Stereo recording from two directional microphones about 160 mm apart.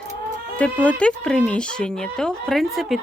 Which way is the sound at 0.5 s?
10° left (ahead or behind).